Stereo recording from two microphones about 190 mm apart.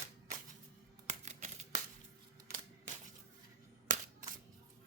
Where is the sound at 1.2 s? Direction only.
40° right (ahead or behind).